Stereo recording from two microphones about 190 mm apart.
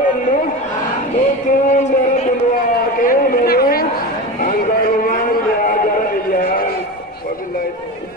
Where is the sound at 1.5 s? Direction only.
40° left (ahead or behind).